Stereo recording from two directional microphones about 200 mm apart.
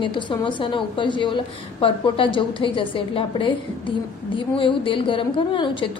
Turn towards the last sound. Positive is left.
turn(degrees=25)  # may be behind; listen again after turning